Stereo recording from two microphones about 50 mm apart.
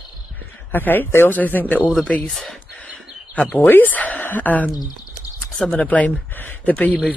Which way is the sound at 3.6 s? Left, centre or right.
Left.